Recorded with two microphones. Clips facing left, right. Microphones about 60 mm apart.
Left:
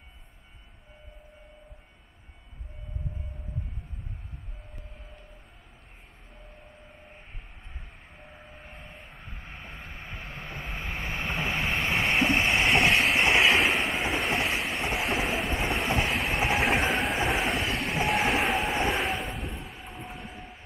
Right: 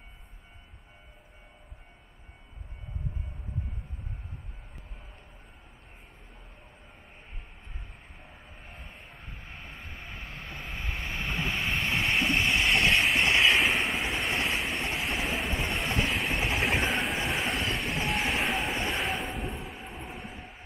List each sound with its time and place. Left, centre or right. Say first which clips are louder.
8.2 s vehicle: left 5 dB; centre
12.2 s vehicle: left 3 dB; centre
12.7 s train: left 2 dB; centre